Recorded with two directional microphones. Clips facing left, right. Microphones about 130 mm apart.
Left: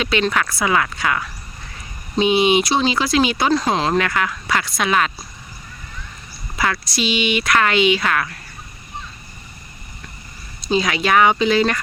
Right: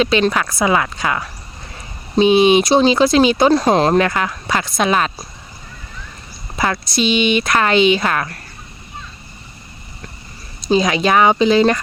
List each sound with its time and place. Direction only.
0.0 s speech: 25° right (ahead or behind)
3.6 s speech: 45° right (ahead or behind)
3.9 s speech: 30° right (ahead or behind)
6.6 s speech: 25° right (ahead or behind)
10.7 s speech: 25° right (ahead or behind)